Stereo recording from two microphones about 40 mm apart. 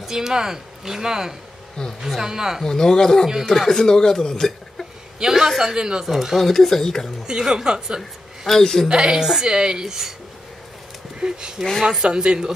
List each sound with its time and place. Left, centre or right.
0.0 s speech: centre
1.8 s speech: centre
2.2 s speech: centre
2.6 s speech: centre
5.2 s a woman's voice: centre
6.0 s speech: centre
6.4 s speech: centre
7.2 s speech: centre
8.5 s speech: centre
8.8 s a woman's voice: centre
11.1 s speech: centre
12.1 s a woman's voice: right